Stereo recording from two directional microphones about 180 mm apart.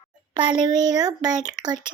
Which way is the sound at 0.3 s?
25° right (ahead or behind).